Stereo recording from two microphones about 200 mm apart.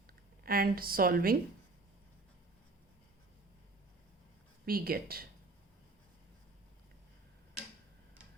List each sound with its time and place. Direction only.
0.4 s a woman's voice: 45° right (ahead or behind)
4.6 s a woman's voice: 45° right (ahead or behind)